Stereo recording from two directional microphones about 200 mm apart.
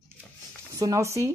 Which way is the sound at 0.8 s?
15° right (ahead or behind).